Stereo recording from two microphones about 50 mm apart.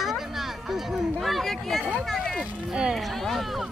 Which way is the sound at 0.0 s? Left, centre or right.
Centre.